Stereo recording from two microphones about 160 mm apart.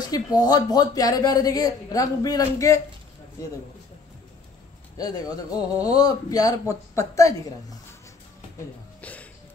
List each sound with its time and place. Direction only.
0.0 s speech: 25° left (ahead or behind)
4.9 s speech: 25° left (ahead or behind)
9.0 s a sound: 10° left (ahead or behind)